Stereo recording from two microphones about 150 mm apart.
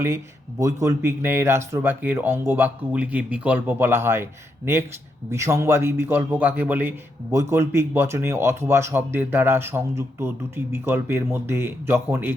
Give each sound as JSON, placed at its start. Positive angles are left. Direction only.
{"t": 0.6, "sound": "a man's voice", "side_deg": -20}